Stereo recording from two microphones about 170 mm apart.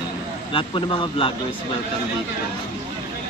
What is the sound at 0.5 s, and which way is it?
Speech, 30° left (ahead or behind).